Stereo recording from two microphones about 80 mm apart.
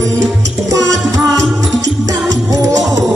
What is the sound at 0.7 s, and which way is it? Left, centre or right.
Music, right.